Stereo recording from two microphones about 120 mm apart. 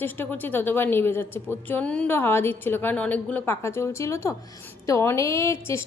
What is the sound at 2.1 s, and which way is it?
A woman's voice, 20° left (ahead or behind).